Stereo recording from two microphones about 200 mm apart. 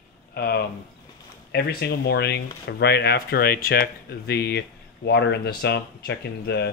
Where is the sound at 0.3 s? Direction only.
50° left (ahead or behind).